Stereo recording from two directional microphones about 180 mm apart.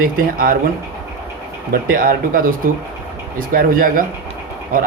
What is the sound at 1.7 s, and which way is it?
Speech, 55° right (ahead or behind).